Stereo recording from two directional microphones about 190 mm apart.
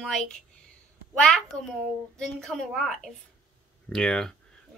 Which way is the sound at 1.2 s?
5° left (ahead or behind).